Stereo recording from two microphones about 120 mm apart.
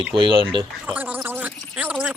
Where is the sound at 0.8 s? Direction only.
15° right (ahead or behind).